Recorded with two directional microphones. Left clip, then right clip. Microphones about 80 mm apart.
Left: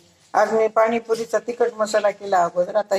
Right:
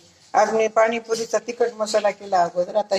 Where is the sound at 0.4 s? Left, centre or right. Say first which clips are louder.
Left 2 dB; left.